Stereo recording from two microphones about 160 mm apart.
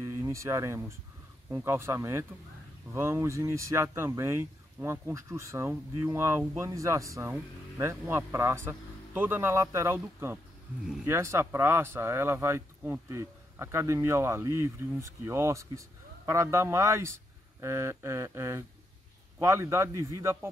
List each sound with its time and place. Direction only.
0.0 s speech: 20° right (ahead or behind)